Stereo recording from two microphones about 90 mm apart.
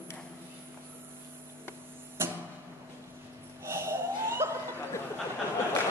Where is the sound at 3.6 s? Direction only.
30° right (ahead or behind).